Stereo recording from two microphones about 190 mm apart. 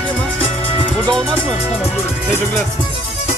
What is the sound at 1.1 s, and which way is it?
Speech, 25° right (ahead or behind).